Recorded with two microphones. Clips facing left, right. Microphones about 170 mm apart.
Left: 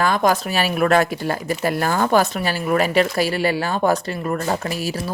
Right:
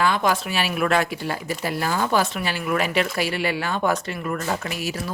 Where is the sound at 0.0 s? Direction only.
45° left (ahead or behind).